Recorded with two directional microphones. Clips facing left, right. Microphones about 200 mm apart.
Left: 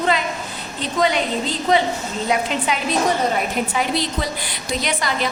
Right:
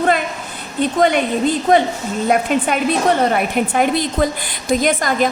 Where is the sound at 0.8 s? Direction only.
55° right (ahead or behind).